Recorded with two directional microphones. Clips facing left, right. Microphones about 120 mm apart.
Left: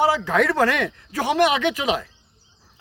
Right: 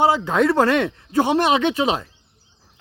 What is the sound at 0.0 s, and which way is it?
Speech, 25° right (ahead or behind).